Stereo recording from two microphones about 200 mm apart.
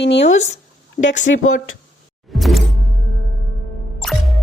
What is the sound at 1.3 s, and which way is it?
Speech, 60° left (ahead or behind).